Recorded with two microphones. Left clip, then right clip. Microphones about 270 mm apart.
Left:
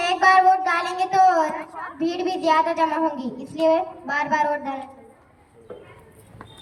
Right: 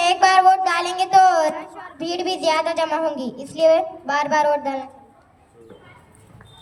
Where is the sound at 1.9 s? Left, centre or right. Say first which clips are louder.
Right 1 dB; centre.